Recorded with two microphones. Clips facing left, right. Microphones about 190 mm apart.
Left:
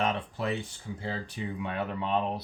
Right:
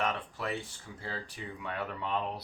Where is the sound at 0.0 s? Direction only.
25° left (ahead or behind).